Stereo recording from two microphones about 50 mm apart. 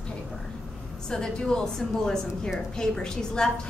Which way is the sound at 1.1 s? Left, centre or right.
Centre.